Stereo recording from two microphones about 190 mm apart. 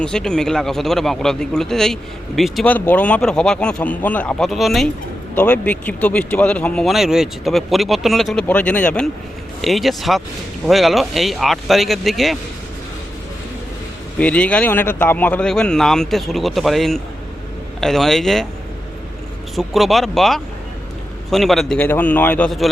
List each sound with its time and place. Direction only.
0.0 s a man's voice: 5° left (ahead or behind)
14.2 s a man's voice: 5° left (ahead or behind)
19.5 s a man's voice: centre (ahead or behind)